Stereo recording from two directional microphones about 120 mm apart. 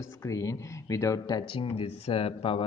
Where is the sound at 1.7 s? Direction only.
50° left (ahead or behind).